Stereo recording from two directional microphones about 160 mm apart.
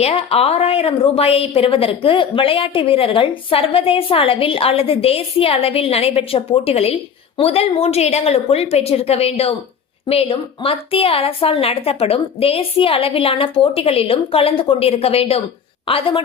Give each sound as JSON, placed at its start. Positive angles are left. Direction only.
{"t": 0.0, "sound": "a woman's voice", "side_deg": 40}